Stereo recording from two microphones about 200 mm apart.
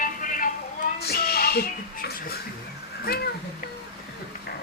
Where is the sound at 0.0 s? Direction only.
40° left (ahead or behind).